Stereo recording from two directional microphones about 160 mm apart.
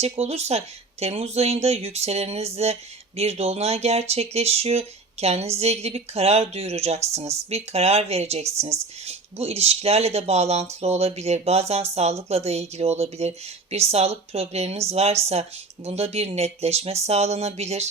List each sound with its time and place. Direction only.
0.0 s speech: 40° right (ahead or behind)